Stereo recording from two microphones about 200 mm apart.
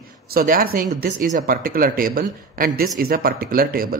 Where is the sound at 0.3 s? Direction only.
45° right (ahead or behind).